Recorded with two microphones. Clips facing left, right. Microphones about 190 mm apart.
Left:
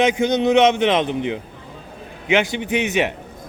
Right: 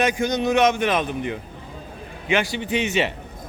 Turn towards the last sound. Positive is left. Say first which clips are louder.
# left 2 dB
turn(degrees=15)  # may be behind; listen again after turning